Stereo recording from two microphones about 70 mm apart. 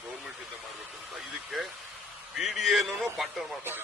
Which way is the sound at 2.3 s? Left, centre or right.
Centre.